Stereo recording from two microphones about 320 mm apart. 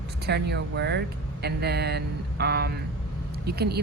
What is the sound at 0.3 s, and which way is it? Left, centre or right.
A woman's voice, right.